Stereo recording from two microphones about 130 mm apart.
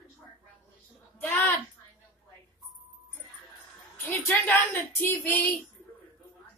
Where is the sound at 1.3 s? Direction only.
15° left (ahead or behind).